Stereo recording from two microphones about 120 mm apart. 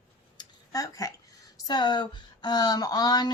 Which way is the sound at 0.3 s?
30° left (ahead or behind).